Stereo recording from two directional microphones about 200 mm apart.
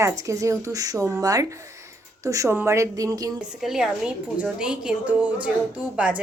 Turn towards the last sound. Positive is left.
turn(degrees=-5)  # may be behind; listen again after turning